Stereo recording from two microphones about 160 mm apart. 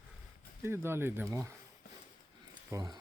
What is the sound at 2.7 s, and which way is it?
Speech, 25° right (ahead or behind).